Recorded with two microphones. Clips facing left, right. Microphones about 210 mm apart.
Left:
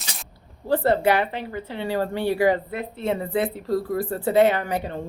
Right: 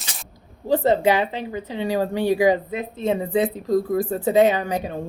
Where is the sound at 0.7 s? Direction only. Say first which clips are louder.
Right 2 dB; 15° right (ahead or behind).